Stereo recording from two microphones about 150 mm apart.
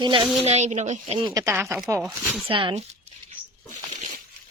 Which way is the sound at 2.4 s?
35° right (ahead or behind).